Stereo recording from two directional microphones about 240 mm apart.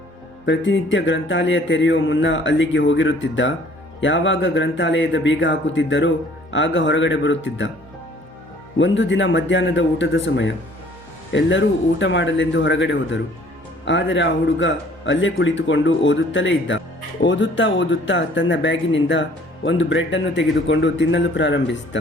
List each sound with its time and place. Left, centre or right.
0.4 s a man's voice: left
8.8 s a man's voice: left